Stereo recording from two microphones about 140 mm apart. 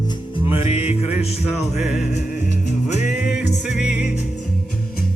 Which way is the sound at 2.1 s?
60° left (ahead or behind).